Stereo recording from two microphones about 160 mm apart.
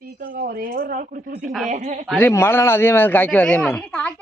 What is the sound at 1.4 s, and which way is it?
Speech, 5° right (ahead or behind).